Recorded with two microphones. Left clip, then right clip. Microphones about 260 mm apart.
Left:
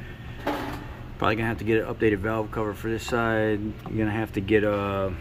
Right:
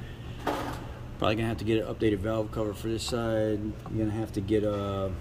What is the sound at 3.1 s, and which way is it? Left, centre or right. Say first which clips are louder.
Speech: left 5 dB; left.